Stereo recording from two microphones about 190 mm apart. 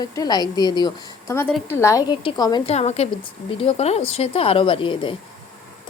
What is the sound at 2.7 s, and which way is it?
A woman's voice, 35° left (ahead or behind).